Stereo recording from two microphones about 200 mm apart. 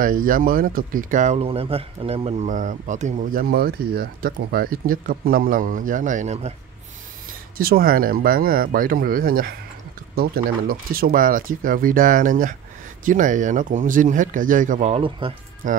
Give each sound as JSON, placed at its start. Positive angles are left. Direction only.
{"t": 0.0, "sound": "speech", "side_deg": -45}
{"t": 7.5, "sound": "speech", "side_deg": -50}
{"t": 15.6, "sound": "speech", "side_deg": -40}